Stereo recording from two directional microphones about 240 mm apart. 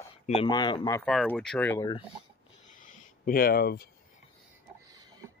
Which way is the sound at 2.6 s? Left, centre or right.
Left.